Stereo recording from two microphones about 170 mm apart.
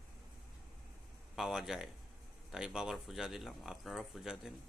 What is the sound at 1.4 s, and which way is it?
Speech, 5° right (ahead or behind).